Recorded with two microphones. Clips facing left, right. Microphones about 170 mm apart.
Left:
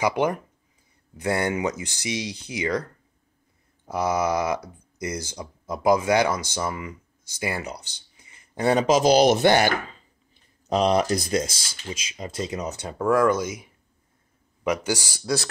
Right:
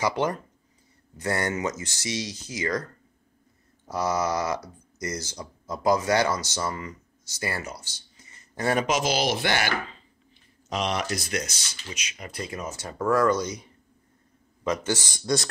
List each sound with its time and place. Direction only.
0.0 s speech: 15° left (ahead or behind)
9.1 s speech: 45° left (ahead or behind)
10.7 s speech: 35° left (ahead or behind); by 15.5 s 5° left (ahead or behind)